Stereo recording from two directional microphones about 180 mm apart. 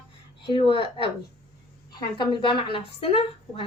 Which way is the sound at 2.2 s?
30° left (ahead or behind).